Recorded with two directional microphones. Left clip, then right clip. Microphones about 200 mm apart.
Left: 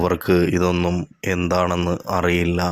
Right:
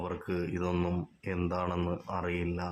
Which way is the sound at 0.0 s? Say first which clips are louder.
Left 17 dB; 30° left (ahead or behind).